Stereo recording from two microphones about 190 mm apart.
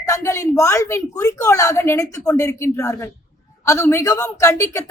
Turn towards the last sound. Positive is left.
turn(degrees=15)  # may be behind; listen again after turning